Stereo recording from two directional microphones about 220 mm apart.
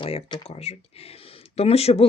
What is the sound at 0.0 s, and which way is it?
A woman's voice, 25° left (ahead or behind).